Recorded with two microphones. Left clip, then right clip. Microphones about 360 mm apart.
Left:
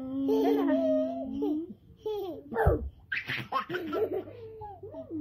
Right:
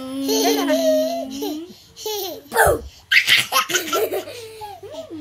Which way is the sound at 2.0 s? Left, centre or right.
Centre.